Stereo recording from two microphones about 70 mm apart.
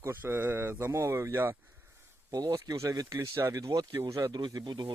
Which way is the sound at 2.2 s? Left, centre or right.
Right.